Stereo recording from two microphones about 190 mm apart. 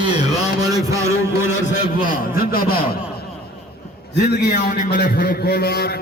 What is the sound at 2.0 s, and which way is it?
Speech, 50° left (ahead or behind).